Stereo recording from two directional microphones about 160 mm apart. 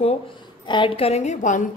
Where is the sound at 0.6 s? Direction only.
30° left (ahead or behind); by 1.6 s 50° left (ahead or behind).